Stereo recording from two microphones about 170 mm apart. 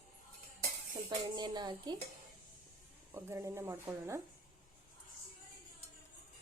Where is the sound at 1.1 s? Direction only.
25° right (ahead or behind).